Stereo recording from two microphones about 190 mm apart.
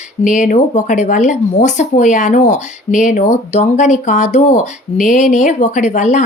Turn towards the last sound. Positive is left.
turn(degrees=40)  # may be behind; listen again after turning